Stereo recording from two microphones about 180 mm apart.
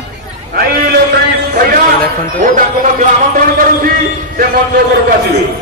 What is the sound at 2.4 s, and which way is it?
Speech, 45° right (ahead or behind).